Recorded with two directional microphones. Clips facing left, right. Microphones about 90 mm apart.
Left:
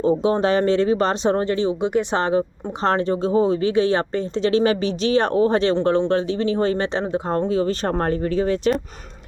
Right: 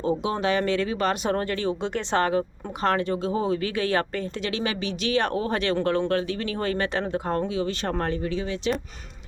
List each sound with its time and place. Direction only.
0.0 s speech: 35° left (ahead or behind)